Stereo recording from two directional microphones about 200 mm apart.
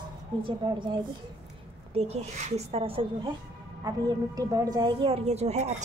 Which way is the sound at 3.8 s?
15° right (ahead or behind).